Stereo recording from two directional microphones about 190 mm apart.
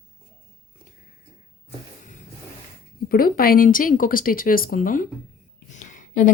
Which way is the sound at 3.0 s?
50° left (ahead or behind).